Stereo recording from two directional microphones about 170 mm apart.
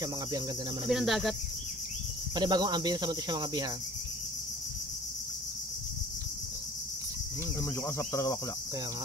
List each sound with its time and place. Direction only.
0.8 s speech: centre (ahead or behind)
2.3 s cricket: 25° right (ahead or behind)
7.8 s speech: 15° left (ahead or behind)